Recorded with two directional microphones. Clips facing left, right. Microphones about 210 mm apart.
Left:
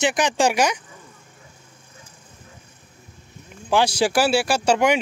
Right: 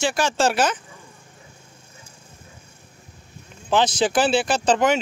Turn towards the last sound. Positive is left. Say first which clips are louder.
# even
turn(degrees=10)  # may be behind; listen again after turning